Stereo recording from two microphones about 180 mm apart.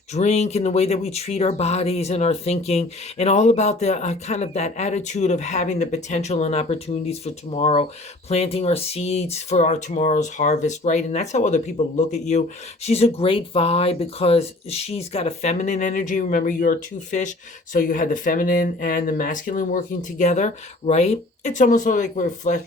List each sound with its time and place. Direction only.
0.1 s speech: 40° left (ahead or behind)